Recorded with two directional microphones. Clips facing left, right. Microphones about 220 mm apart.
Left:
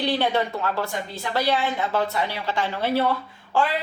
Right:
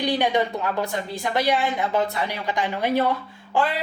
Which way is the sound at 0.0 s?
15° right (ahead or behind).